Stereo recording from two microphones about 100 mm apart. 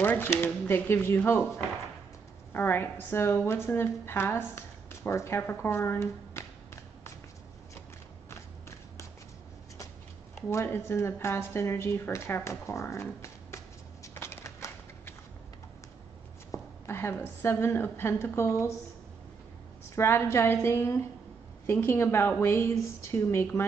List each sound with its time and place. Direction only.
0.0 s a woman's voice: 20° left (ahead or behind)
2.5 s a woman's voice: 25° left (ahead or behind)
8.3 s a sound: 30° left (ahead or behind)
10.5 s a woman's voice: 25° left (ahead or behind)
14.0 s a sound: 25° left (ahead or behind)
16.5 s a woman's voice: 25° left (ahead or behind)
20.0 s a woman's voice: 25° left (ahead or behind)